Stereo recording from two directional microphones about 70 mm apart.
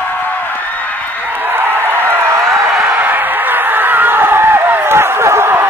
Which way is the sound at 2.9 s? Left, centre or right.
Right.